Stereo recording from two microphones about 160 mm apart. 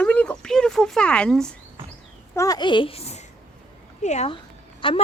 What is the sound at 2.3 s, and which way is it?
A child's voice, 20° left (ahead or behind).